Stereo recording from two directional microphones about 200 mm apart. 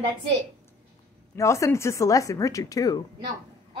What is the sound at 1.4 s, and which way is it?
Speech, 15° left (ahead or behind).